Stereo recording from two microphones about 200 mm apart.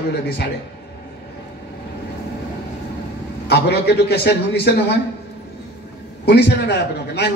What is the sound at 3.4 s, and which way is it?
A man's voice, 55° left (ahead or behind).